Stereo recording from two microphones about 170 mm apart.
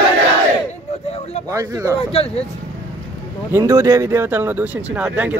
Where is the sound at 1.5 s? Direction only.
20° right (ahead or behind).